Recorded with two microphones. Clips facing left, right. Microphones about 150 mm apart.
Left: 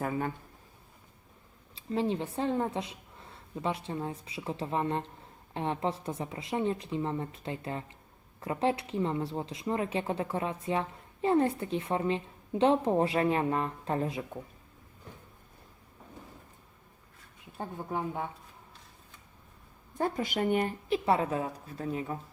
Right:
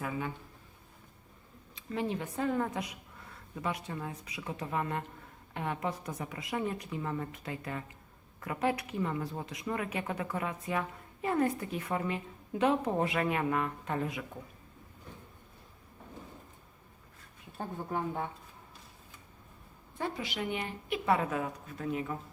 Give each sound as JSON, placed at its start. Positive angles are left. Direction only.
{"t": 0.0, "sound": "speech", "side_deg": 45}
{"t": 1.7, "sound": "speech", "side_deg": 30}
{"t": 17.6, "sound": "speech", "side_deg": 10}
{"t": 19.9, "sound": "speech", "side_deg": 45}
{"t": 20.9, "sound": "speech", "side_deg": 30}